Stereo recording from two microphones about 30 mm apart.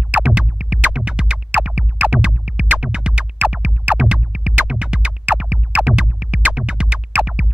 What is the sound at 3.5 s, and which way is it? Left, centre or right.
Music, right.